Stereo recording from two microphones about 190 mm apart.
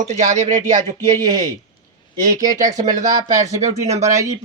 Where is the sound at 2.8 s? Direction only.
40° right (ahead or behind).